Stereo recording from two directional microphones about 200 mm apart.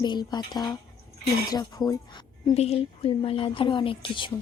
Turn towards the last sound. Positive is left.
turn(degrees=25)  # may be behind; listen again after turning